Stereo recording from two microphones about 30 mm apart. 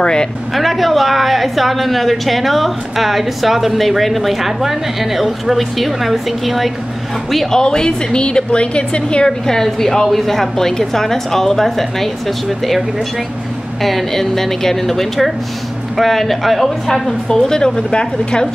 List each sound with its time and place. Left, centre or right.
0.0 s speech: left
0.6 s a woman's voice: centre
7.5 s a woman's voice: left
9.5 s a woman's voice: centre
13.8 s a woman's voice: centre
17.4 s speech: centre